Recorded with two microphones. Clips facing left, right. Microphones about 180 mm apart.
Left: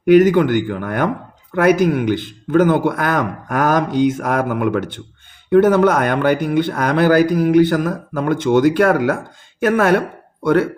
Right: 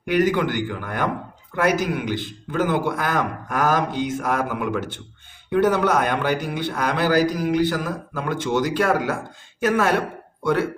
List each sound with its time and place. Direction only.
0.0 s speech: 50° left (ahead or behind)